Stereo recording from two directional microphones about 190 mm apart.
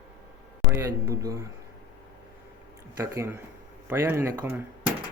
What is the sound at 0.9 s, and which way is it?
Speech, 15° right (ahead or behind).